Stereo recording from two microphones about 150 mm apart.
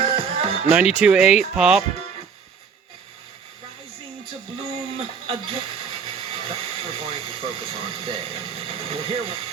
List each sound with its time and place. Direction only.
0.0 s music: 40° right (ahead or behind)
0.7 s speech: 10° right (ahead or behind)
4.3 s a sound: 40° right (ahead or behind)